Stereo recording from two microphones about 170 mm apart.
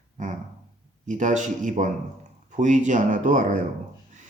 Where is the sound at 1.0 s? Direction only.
45° right (ahead or behind).